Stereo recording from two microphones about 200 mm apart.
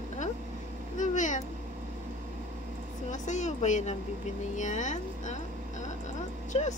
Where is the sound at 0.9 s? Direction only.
40° left (ahead or behind).